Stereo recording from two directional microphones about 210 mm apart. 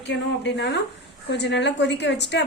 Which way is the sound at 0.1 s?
55° left (ahead or behind).